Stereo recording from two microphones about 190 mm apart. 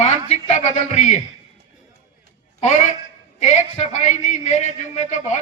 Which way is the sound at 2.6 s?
40° left (ahead or behind).